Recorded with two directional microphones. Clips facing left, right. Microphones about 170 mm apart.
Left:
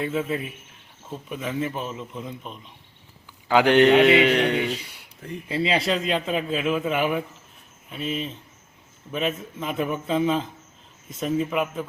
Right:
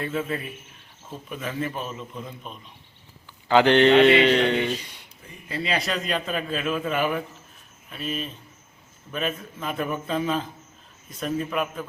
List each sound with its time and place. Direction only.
0.0 s a man's voice: 10° left (ahead or behind)
3.5 s a man's voice: 10° left (ahead or behind)
5.5 s a man's voice: 25° left (ahead or behind)